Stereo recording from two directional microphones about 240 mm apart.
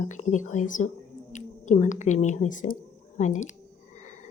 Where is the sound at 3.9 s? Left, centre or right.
Left.